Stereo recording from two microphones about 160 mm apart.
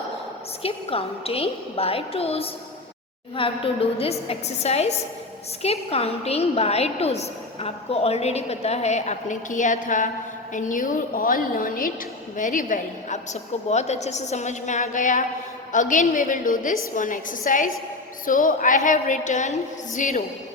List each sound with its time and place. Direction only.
0.6 s a woman's voice: 35° left (ahead or behind)